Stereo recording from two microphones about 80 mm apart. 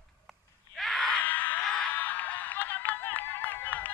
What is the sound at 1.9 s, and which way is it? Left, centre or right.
Music, left.